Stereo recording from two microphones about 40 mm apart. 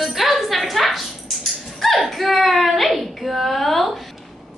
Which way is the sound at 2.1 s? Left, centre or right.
Centre.